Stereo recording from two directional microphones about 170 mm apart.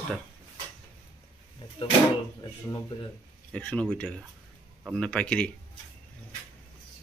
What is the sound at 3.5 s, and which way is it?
Speech, 5° left (ahead or behind).